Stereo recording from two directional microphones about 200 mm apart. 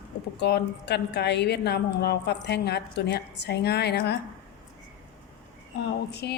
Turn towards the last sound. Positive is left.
turn(degrees=55)  # may be behind; listen again after turning